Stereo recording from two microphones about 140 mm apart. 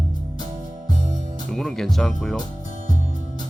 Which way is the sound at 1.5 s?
Centre (ahead or behind).